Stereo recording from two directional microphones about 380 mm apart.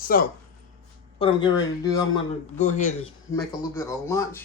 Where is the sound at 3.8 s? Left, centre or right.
Centre.